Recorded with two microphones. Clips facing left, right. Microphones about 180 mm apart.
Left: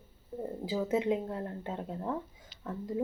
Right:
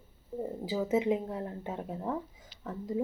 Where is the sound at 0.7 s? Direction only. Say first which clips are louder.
Right 1 dB; 5° right (ahead or behind).